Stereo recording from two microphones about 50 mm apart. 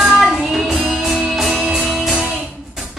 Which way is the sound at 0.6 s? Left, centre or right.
Centre.